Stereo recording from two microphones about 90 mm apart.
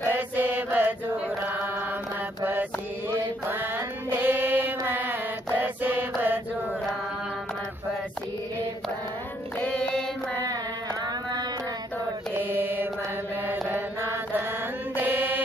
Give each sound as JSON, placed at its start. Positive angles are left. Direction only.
{"t": 0.1, "sound": "mantra", "side_deg": -25}
{"t": 4.1, "sound": "mantra", "side_deg": -25}
{"t": 9.7, "sound": "mantra", "side_deg": 10}
{"t": 12.4, "sound": "mantra", "side_deg": -20}